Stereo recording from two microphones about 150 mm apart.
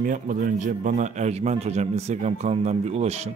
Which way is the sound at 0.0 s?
65° right (ahead or behind).